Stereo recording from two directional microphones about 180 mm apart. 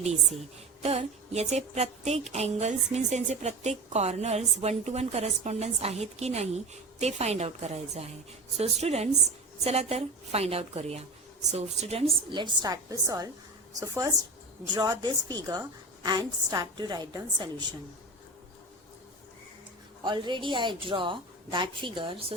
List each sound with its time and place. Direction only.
0.8 s a woman's voice: 35° right (ahead or behind)
20.0 s a woman's voice: 25° right (ahead or behind)